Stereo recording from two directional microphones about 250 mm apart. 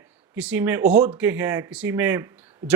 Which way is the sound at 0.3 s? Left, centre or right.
Centre.